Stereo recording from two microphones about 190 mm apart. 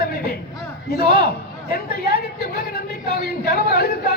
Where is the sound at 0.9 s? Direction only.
55° left (ahead or behind).